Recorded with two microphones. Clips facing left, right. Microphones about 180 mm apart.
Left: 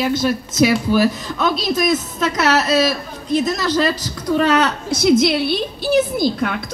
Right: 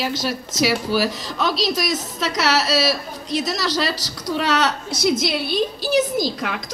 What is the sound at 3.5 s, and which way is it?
A woman's voice, 50° left (ahead or behind).